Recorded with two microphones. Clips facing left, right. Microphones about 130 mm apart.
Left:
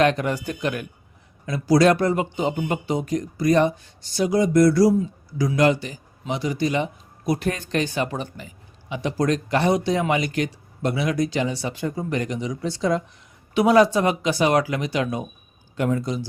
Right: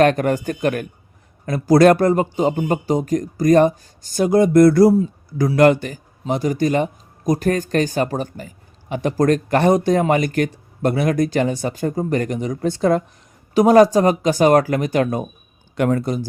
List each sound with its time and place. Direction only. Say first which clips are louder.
0.0 s a man's voice: right 5 dB; 50° right (ahead or behind)
15.7 s speech: right 5 dB; 65° right (ahead or behind)